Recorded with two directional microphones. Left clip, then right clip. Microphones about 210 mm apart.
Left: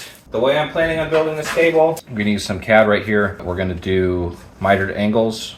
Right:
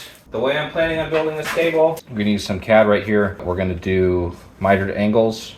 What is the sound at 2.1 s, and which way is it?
Speech, 15° right (ahead or behind).